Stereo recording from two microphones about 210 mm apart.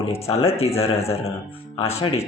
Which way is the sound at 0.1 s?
30° left (ahead or behind).